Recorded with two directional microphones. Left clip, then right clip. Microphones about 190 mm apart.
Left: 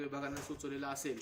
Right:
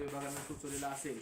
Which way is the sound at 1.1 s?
10° right (ahead or behind).